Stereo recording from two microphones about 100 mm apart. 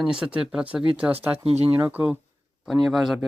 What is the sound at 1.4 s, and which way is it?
Speech, 85° right.